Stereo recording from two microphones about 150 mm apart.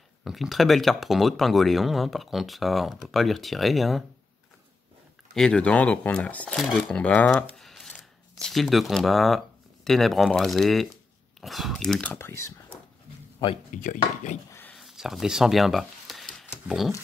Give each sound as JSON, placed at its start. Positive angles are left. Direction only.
{"t": 0.2, "sound": "speech", "side_deg": 0}
{"t": 5.3, "sound": "speech", "side_deg": 5}
{"t": 13.7, "sound": "chopping", "side_deg": 60}
{"t": 14.7, "sound": "a sound", "side_deg": 0}
{"t": 16.6, "sound": "speech", "side_deg": 0}